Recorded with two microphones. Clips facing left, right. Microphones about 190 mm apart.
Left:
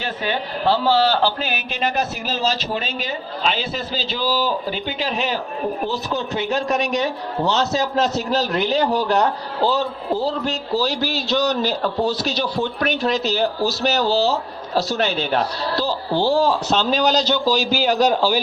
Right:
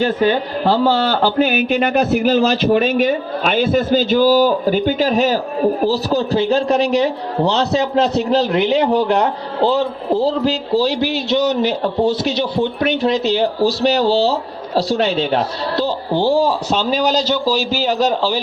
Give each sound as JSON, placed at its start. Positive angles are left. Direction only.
{"t": 0.0, "sound": "a man's voice", "side_deg": -45}